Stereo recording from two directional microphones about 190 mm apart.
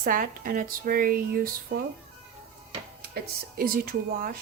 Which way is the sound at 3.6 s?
50° right (ahead or behind).